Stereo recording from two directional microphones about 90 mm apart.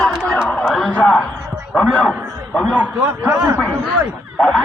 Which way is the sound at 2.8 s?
20° right (ahead or behind).